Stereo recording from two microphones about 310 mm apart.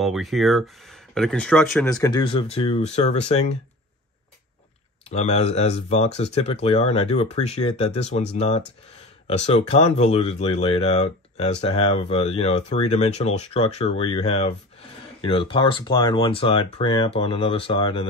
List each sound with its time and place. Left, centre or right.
0.0 s speech: centre; by 3.5 s left
5.1 s speech: left